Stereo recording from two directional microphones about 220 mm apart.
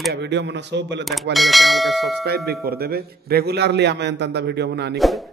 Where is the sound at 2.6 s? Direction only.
45° right (ahead or behind).